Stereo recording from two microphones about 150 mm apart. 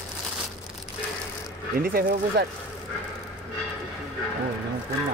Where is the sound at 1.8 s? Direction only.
80° right.